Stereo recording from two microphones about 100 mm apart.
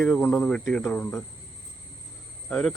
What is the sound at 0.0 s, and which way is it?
Speech, 10° left (ahead or behind).